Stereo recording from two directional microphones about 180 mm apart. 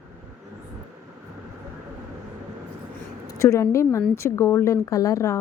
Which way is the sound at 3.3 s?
15° left (ahead or behind).